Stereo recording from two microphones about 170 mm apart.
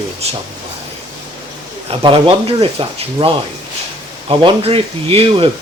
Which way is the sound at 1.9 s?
30° right (ahead or behind).